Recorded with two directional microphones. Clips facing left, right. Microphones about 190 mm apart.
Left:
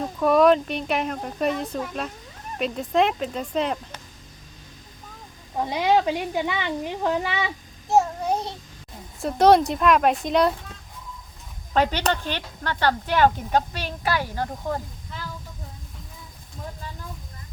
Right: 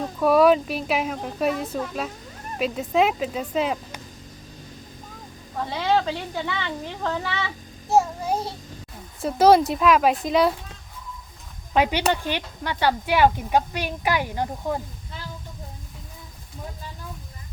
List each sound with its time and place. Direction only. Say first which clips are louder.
0.0 s speech: even; centre (ahead or behind)
5.5 s speech: left 2 dB; 15° left (ahead or behind)
7.9 s child singing: even; centre (ahead or behind)
9.2 s speech: even; centre (ahead or behind)
11.7 s speech: right 1 dB; 10° right (ahead or behind)